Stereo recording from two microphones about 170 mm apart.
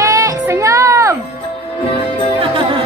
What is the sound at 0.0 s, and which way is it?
Music, 20° right (ahead or behind).